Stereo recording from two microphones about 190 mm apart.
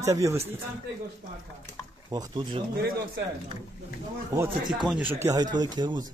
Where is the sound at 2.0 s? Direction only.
20° right (ahead or behind).